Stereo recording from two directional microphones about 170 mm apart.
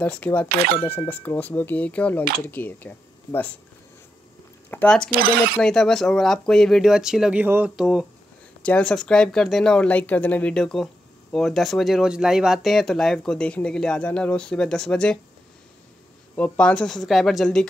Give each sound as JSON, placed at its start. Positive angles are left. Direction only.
{"t": 0.0, "sound": "speech", "side_deg": 10}
{"t": 0.5, "sound": "speech", "side_deg": -65}
{"t": 0.8, "sound": "speech", "side_deg": 10}
{"t": 4.6, "sound": "speech", "side_deg": 10}
{"t": 16.3, "sound": "speech", "side_deg": 5}